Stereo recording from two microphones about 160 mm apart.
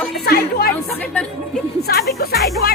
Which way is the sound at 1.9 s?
70° left (ahead or behind).